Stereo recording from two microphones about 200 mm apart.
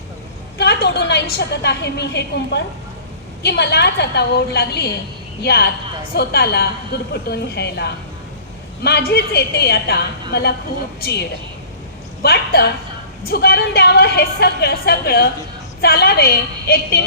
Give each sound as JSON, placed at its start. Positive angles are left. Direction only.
{"t": 0.6, "sound": "a woman's voice", "side_deg": 55}